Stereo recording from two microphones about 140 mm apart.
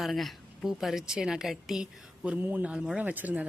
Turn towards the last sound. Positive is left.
turn(degrees=-10)  # may be behind; listen again after turning